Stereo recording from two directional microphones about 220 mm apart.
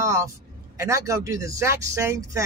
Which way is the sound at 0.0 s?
15° right (ahead or behind).